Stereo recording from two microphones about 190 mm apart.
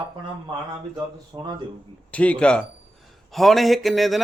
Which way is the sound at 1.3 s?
20° right (ahead or behind).